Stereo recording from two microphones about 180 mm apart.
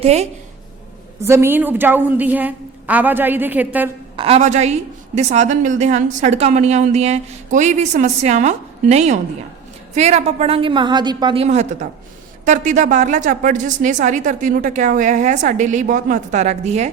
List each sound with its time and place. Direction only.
0.0 s a woman's voice: 35° right (ahead or behind)
1.2 s a woman's voice: 15° right (ahead or behind)
4.2 s a woman's voice: 35° right (ahead or behind)
11.4 s a woman's voice: 40° right (ahead or behind)